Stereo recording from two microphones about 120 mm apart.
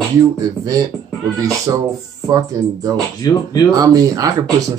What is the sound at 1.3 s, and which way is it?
A man's voice, 30° right (ahead or behind).